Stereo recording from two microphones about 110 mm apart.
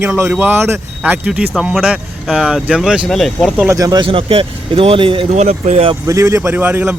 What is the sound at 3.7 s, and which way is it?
Speech, 35° right (ahead or behind).